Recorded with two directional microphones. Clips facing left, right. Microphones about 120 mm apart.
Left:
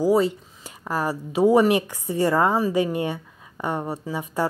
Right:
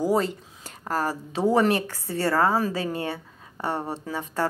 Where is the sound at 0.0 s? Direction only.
10° left (ahead or behind).